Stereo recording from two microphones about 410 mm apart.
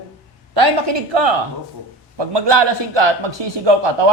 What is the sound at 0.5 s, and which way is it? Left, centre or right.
A man's voice, right.